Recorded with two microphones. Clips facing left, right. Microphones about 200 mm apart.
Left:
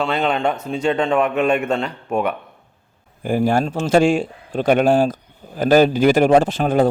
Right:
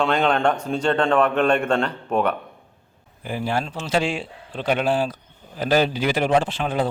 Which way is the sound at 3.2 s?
45° left (ahead or behind).